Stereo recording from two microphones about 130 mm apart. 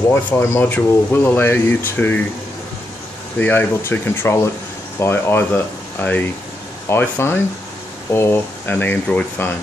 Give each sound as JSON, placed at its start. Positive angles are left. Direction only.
{"t": 0.1, "sound": "speech", "side_deg": 20}
{"t": 3.3, "sound": "speech", "side_deg": 15}